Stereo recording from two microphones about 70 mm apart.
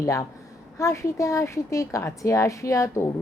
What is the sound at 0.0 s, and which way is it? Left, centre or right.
A woman's voice, left.